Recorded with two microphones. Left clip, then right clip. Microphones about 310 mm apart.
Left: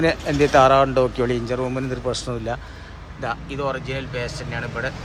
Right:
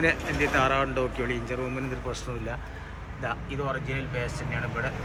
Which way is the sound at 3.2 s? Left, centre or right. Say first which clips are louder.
Left 6 dB; centre.